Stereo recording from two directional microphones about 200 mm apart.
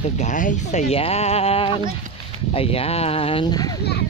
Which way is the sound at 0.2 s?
40° left (ahead or behind).